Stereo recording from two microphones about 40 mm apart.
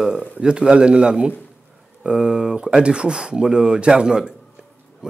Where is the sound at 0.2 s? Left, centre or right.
Right.